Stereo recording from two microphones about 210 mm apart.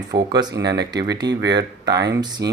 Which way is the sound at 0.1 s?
50° right (ahead or behind).